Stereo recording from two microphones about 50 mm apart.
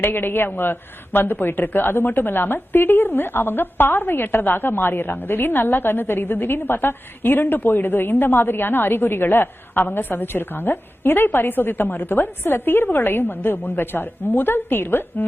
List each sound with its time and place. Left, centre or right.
0.0 s a woman's voice: left